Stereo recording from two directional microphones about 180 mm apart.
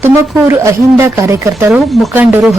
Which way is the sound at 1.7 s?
5° right (ahead or behind).